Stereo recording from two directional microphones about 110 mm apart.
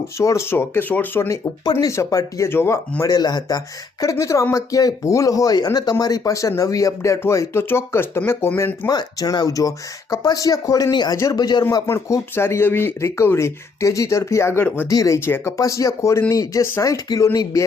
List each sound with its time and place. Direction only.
0.2 s speech: 25° left (ahead or behind)
3.0 s speech: 35° left (ahead or behind); by 8.9 s 20° left (ahead or behind)
8.9 s speech: 40° left (ahead or behind)
11.9 s speech: 25° left (ahead or behind)
14.8 s speech: 30° left (ahead or behind)